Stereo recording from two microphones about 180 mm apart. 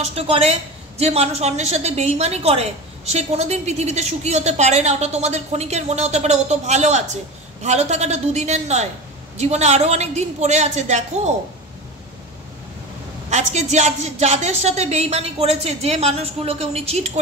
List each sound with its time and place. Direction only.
0.0 s a woman's voice: 35° right (ahead or behind)
13.3 s a woman's voice: 40° right (ahead or behind)